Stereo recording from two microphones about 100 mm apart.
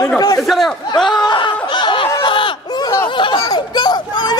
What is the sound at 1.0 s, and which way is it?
Snicker, 50° left (ahead or behind).